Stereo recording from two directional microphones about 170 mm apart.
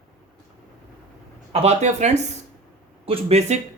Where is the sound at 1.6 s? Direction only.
40° right (ahead or behind).